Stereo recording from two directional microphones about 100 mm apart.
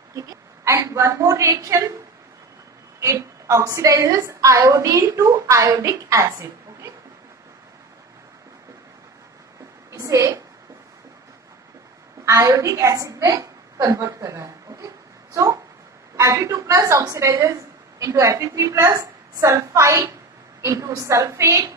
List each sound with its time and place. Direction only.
0.1 s a woman's voice: 30° right (ahead or behind)
3.0 s a woman's voice: 30° right (ahead or behind)
9.9 s a sound: 30° right (ahead or behind)
12.3 s a woman's voice: 35° right (ahead or behind)
15.3 s dog: 30° right (ahead or behind)
16.2 s a woman's voice: 30° right (ahead or behind)